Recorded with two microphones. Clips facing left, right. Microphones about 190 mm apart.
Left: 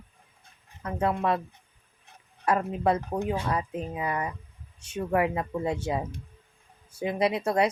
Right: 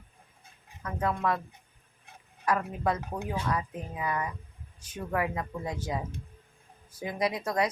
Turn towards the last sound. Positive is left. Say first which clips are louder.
# left 4 dB
turn(degrees=30)  # may be behind; listen again after turning